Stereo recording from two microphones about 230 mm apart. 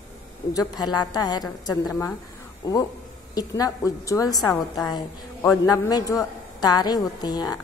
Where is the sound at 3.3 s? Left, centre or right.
Centre.